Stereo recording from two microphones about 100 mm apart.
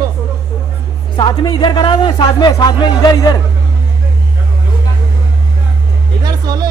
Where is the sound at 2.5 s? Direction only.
40° left (ahead or behind).